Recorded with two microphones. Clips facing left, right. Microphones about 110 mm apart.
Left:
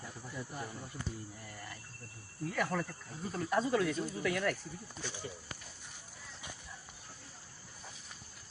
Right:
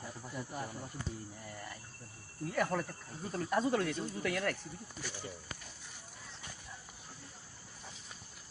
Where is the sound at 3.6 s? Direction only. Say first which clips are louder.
Left 1 dB; 45° right (ahead or behind).